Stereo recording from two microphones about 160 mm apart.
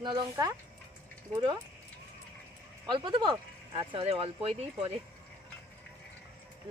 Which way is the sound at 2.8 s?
30° right (ahead or behind).